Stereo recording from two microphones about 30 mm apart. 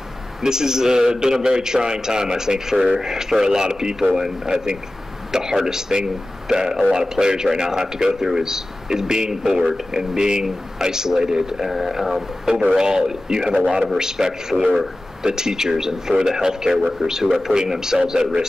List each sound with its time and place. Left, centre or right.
0.4 s a man's voice: centre
11.6 s a man's voice: centre